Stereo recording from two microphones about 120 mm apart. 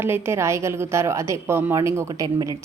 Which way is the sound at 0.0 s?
20° right (ahead or behind).